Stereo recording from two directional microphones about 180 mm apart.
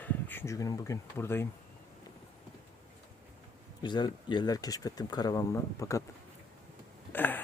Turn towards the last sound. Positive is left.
turn(degrees=10)  # may be behind; listen again after turning